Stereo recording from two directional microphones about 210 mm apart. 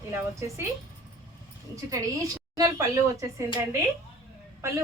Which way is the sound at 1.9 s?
15° right (ahead or behind).